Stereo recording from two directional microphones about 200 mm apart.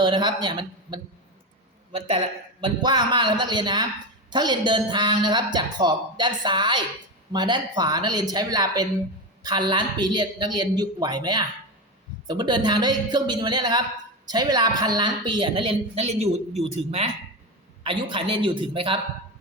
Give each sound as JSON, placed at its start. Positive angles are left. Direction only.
{"t": 0.0, "sound": "a woman's voice", "side_deg": -20}